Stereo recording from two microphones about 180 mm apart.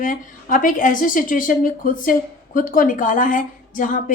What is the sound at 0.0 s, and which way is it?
A woman's voice, 50° left (ahead or behind).